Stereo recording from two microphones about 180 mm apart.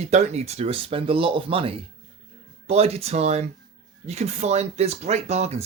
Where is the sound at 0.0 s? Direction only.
40° right (ahead or behind).